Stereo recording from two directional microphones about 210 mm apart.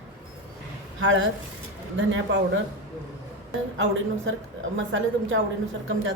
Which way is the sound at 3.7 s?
65° right (ahead or behind).